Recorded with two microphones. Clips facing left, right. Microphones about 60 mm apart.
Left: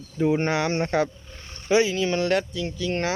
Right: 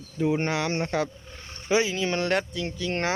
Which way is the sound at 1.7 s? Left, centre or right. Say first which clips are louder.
Left 3 dB; centre.